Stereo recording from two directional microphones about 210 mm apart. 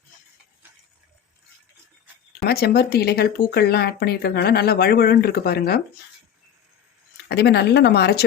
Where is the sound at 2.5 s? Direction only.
45° left (ahead or behind).